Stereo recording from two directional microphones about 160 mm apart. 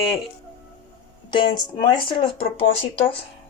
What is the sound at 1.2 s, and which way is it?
Speech, 30° left (ahead or behind).